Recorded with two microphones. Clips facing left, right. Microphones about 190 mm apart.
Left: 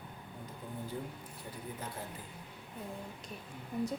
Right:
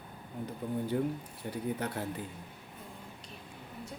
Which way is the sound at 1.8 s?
70° right (ahead or behind).